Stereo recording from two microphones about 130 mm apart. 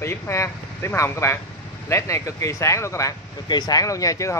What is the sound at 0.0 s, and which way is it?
Speech, 20° left (ahead or behind).